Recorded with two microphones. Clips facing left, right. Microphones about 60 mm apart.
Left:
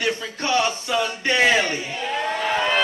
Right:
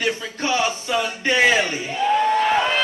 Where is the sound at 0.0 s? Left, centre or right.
Centre.